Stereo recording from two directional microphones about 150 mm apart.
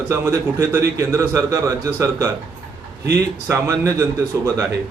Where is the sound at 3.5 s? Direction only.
20° right (ahead or behind).